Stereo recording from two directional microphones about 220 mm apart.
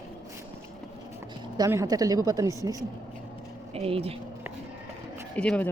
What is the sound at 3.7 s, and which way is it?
Speech, 25° right (ahead or behind).